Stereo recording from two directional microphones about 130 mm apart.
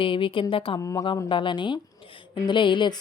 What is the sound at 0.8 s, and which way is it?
Speech, 25° left (ahead or behind).